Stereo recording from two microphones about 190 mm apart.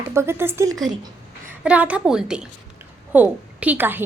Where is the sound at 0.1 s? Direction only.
15° right (ahead or behind).